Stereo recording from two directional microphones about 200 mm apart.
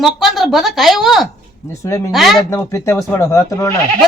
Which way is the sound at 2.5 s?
15° left (ahead or behind).